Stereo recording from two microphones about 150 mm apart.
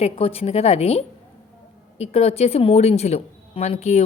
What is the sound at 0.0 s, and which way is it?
A woman's voice, 40° left (ahead or behind).